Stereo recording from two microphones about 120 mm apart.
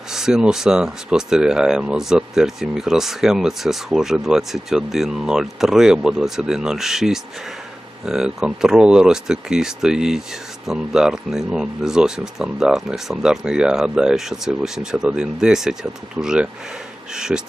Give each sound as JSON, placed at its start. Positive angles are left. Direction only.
{"t": 0.1, "sound": "speech", "side_deg": -5}